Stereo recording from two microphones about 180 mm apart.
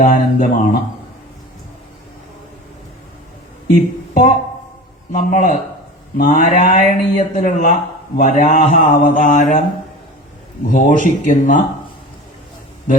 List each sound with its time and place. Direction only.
0.0 s speech: 45° left (ahead or behind)
3.8 s guitar: 45° left (ahead or behind)
5.1 s speech: 45° left (ahead or behind)
10.7 s speech: 45° left (ahead or behind)